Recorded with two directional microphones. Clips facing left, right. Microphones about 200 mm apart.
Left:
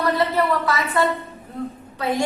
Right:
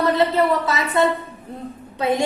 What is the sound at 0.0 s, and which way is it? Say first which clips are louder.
A woman's voice: right 3 dB; 25° right (ahead or behind).